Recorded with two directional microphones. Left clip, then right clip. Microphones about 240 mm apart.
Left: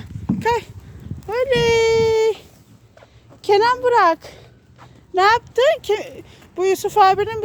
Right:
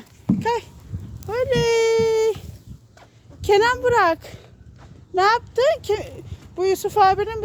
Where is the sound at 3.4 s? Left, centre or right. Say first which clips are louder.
Left 2 dB; centre.